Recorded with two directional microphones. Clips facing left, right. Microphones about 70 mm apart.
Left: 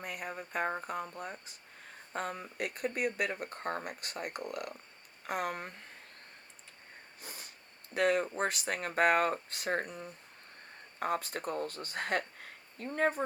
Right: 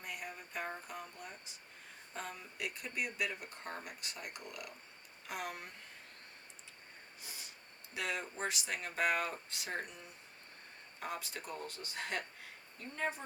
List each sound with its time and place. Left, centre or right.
0.0 s a sound: left
2.1 s speech: left
7.2 s snort: left
7.9 s speech: left